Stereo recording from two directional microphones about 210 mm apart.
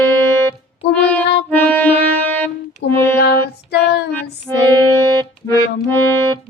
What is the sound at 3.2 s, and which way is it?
Female singing, 50° left (ahead or behind).